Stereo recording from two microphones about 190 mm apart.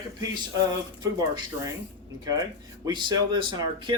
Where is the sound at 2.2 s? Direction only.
20° right (ahead or behind).